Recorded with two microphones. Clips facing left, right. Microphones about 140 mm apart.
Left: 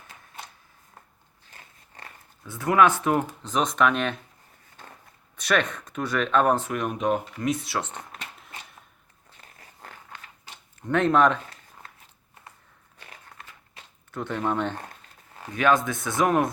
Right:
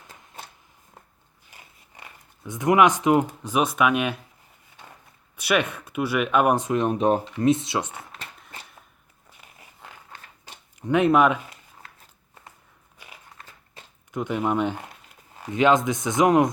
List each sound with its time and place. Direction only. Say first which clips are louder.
1.5 s speech: even; 10° right (ahead or behind)
5.4 s speech: right 1 dB; 10° right (ahead or behind)
10.8 s speech: right 2 dB; 10° right (ahead or behind)
14.1 s speech: right 3 dB; 15° right (ahead or behind)